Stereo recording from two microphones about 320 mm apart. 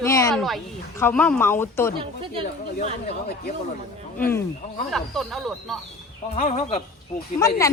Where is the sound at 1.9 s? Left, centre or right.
Centre.